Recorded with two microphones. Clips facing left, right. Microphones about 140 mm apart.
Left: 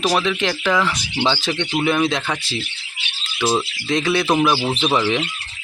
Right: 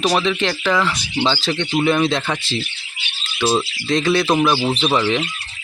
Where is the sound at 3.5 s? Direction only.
15° left (ahead or behind).